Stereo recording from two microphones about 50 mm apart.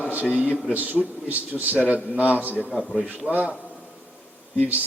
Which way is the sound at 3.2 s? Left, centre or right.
Right.